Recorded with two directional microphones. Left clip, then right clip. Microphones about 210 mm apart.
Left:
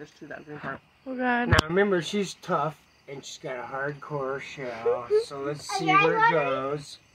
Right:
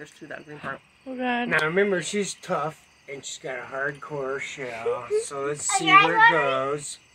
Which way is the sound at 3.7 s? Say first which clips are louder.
Right 3 dB; 40° left (ahead or behind).